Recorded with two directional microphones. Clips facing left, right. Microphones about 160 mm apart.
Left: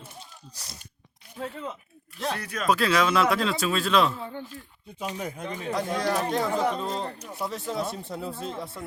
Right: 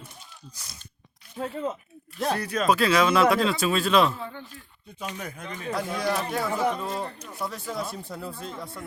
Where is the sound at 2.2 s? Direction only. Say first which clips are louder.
Right 5 dB; 40° right (ahead or behind).